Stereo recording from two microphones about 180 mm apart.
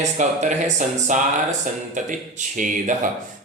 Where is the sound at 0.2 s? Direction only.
45° right (ahead or behind).